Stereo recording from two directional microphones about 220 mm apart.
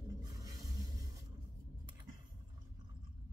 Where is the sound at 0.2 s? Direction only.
15° right (ahead or behind).